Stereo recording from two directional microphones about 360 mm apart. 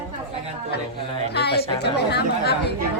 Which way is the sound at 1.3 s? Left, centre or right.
Left.